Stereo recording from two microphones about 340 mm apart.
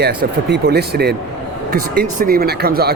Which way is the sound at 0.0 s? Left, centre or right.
Right.